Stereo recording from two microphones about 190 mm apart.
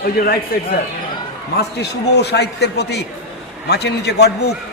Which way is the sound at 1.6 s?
60° left (ahead or behind).